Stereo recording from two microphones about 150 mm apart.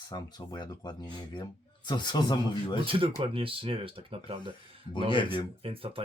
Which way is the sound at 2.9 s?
40° right (ahead or behind).